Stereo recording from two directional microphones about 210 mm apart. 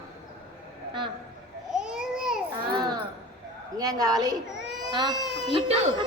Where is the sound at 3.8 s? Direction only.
20° right (ahead or behind).